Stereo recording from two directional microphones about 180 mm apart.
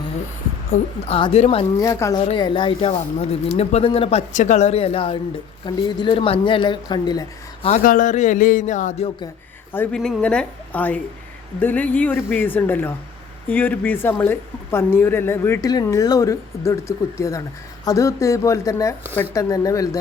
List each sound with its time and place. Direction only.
1.0 s speech: 35° left (ahead or behind)
1.8 s speech: 15° left (ahead or behind)
2.2 s speech: 30° left (ahead or behind)
4.3 s speech: 40° left (ahead or behind); by 7.7 s 25° left (ahead or behind)
7.7 s a man's voice: 45° left (ahead or behind)
9.7 s speech: 5° left (ahead or behind)